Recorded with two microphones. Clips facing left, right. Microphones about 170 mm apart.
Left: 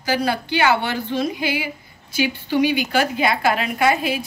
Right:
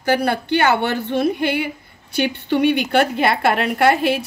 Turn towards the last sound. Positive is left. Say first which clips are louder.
# right 3 dB
turn(degrees=-65)  # may be behind; listen again after turning